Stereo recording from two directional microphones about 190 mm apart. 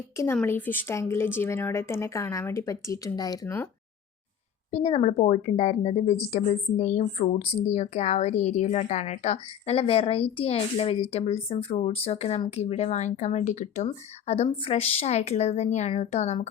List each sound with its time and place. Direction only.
0.3 s a woman's voice: 10° left (ahead or behind)
4.7 s a woman's voice: 30° left (ahead or behind)